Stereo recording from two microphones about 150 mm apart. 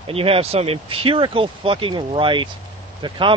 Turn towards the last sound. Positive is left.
turn(degrees=-35)  # may be behind; listen again after turning